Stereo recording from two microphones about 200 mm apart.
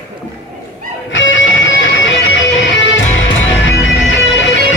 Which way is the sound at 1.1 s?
65° left (ahead or behind).